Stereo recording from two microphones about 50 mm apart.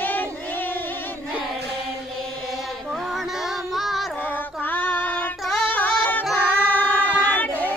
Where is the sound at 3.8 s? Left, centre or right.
Centre.